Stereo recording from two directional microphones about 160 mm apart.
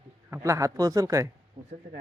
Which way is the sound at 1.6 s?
60° right (ahead or behind).